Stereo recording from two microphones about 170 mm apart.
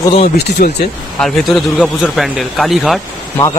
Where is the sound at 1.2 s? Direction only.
Centre (ahead or behind).